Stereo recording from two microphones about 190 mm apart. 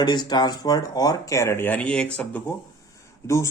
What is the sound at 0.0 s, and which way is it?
Speech, 20° left (ahead or behind).